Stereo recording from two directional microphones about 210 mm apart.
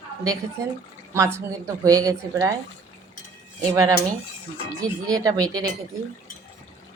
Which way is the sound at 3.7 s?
15° right (ahead or behind).